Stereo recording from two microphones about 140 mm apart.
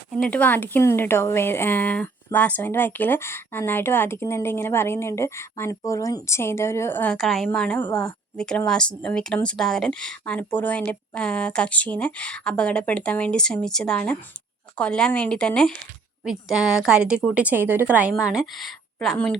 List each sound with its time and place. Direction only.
0.3 s speech: 10° left (ahead or behind)
7.2 s a woman's voice: centre (ahead or behind)